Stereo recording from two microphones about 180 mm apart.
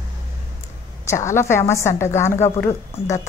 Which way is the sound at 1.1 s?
15° left (ahead or behind).